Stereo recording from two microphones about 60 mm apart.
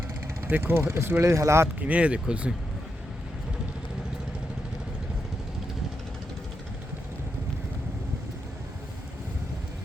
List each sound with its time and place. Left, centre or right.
0.4 s speech: right
1.8 s speech: right